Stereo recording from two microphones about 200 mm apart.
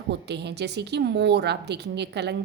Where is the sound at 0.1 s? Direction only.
55° right (ahead or behind).